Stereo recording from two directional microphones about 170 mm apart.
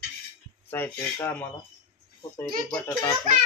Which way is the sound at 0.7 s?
10° left (ahead or behind).